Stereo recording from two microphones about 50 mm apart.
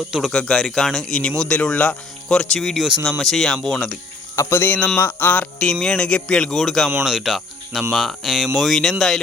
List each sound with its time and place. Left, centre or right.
0.3 s speech: centre
1.7 s speech: left
2.3 s speech: centre
4.4 s speech: left
4.6 s cricket: left
5.9 s speech: centre
7.0 s speech: centre